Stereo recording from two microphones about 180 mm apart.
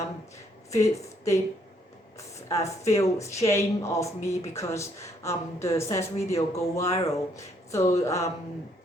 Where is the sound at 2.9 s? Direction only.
15° left (ahead or behind).